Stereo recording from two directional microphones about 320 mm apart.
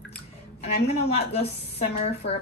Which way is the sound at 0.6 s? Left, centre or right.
Centre.